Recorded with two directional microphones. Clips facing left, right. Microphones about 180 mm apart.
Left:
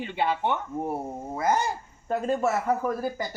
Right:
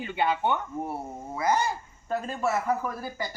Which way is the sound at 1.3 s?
45° left (ahead or behind).